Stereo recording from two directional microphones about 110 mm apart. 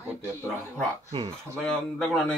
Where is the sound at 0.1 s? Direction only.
20° right (ahead or behind).